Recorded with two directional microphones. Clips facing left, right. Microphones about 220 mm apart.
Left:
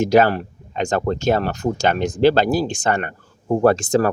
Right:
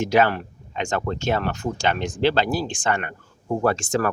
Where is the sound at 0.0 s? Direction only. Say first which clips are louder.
Left 5 dB; 40° left (ahead or behind).